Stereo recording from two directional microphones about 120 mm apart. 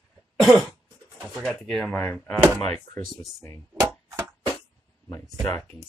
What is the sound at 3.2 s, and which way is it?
Speech, 25° left (ahead or behind).